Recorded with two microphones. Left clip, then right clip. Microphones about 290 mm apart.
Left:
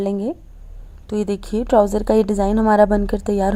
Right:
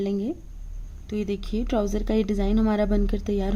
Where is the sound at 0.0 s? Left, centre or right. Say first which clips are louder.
Left 6 dB; centre.